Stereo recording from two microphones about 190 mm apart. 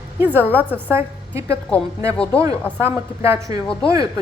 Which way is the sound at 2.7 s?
15° right (ahead or behind).